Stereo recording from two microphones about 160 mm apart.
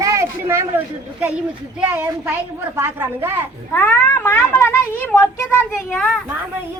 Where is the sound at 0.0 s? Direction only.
20° right (ahead or behind).